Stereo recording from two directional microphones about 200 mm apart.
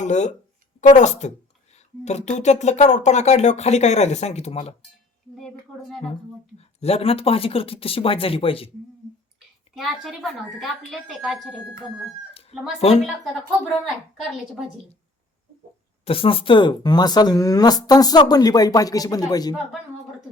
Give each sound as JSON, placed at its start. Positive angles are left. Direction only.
{"t": 0.0, "sound": "speech", "side_deg": 35}
{"t": 6.6, "sound": "speech", "side_deg": 30}
{"t": 9.7, "sound": "a woman's voice", "side_deg": 0}
{"t": 12.3, "sound": "chicken", "side_deg": 30}
{"t": 13.8, "sound": "a woman's voice", "side_deg": 0}
{"t": 16.0, "sound": "speech", "side_deg": 25}